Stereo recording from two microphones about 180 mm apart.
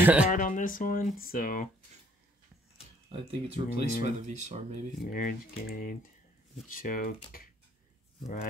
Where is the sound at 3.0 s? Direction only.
30° right (ahead or behind).